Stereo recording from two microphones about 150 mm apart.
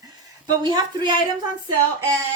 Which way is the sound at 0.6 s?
30° right (ahead or behind).